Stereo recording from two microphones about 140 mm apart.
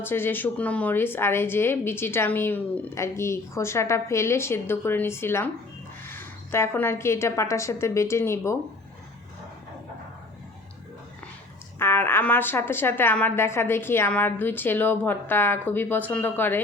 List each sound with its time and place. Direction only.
0.0 s a woman's voice: 15° left (ahead or behind)
11.8 s speech: 15° left (ahead or behind)